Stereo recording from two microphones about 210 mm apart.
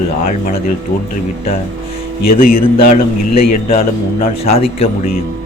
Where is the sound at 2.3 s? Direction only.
45° left (ahead or behind).